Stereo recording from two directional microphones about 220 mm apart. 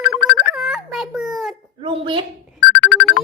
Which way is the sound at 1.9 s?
20° right (ahead or behind).